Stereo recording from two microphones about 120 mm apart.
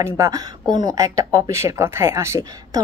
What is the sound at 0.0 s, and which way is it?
Speech, 30° right (ahead or behind).